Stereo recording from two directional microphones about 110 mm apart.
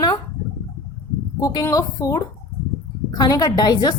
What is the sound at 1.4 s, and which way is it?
A woman's voice, 30° left (ahead or behind).